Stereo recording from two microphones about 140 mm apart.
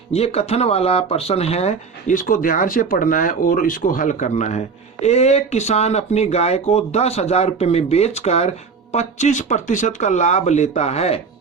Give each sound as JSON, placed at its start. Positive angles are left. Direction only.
{"t": 0.1, "sound": "speech", "side_deg": 45}
{"t": 2.1, "sound": "speech", "side_deg": 75}